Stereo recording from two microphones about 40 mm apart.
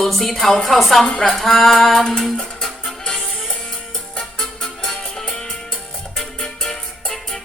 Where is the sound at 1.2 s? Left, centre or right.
Centre.